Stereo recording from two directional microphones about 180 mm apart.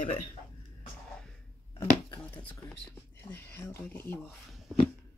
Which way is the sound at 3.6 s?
10° left (ahead or behind).